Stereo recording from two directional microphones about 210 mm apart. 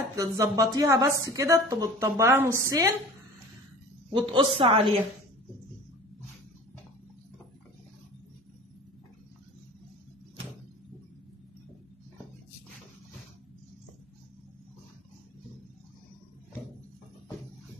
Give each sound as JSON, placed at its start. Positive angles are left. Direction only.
{"t": 0.1, "sound": "a woman's voice", "side_deg": -15}
{"t": 4.1, "sound": "a woman's voice", "side_deg": -25}